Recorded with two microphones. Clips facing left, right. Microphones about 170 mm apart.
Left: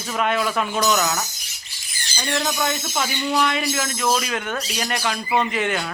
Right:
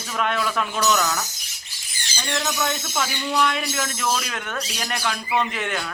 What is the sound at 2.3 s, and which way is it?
Speech, 10° left (ahead or behind).